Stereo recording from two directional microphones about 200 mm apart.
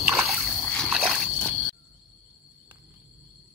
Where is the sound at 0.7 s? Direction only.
Centre (ahead or behind).